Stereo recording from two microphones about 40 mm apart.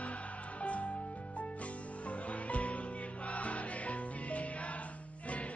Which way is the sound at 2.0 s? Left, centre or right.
Left.